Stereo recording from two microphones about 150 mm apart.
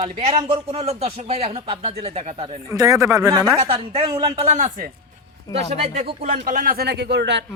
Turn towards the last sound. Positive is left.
turn(degrees=-90)